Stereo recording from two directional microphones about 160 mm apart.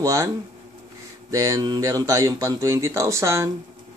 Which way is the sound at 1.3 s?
20° right (ahead or behind).